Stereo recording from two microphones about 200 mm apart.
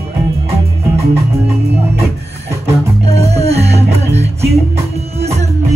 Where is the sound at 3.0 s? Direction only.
30° right (ahead or behind).